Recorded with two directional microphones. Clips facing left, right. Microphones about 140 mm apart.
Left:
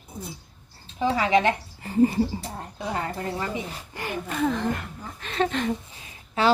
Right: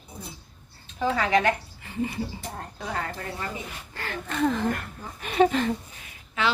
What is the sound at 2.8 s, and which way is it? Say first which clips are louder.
A woman's voice: left 3 dB; 25° left (ahead or behind).